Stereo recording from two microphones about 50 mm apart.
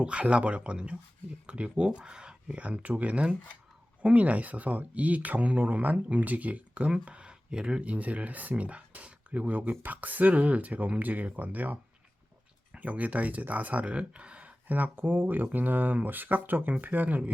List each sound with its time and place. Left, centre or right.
0.0 s speech: right